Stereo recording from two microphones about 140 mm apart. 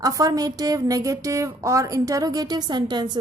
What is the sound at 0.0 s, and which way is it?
A woman's voice, 25° right (ahead or behind).